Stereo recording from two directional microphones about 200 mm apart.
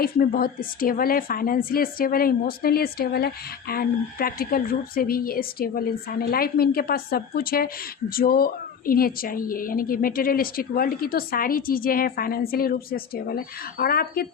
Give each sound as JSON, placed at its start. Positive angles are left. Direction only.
{"t": 0.0, "sound": "speech", "side_deg": 45}